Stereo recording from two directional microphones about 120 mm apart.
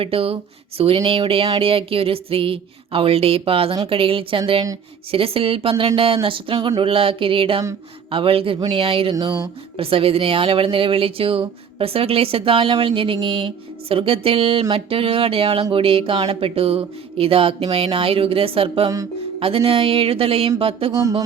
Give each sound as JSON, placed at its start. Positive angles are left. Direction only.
{"t": 0.0, "sound": "speech", "side_deg": -50}
{"t": 9.1, "sound": "speech", "side_deg": -30}
{"t": 9.7, "sound": "speech", "side_deg": -50}
{"t": 20.9, "sound": "speech", "side_deg": -30}